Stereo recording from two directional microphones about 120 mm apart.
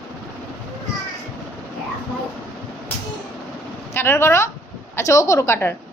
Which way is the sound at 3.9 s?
20° left (ahead or behind).